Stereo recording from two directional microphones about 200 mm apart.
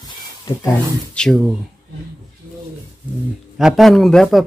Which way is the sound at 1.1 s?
Centre (ahead or behind).